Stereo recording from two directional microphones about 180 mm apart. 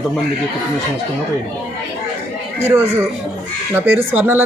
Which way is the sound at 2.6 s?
10° right (ahead or behind).